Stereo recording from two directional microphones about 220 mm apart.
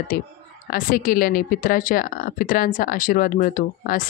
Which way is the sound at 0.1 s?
40° left (ahead or behind).